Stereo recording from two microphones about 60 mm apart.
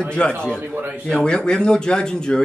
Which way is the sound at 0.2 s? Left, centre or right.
Centre.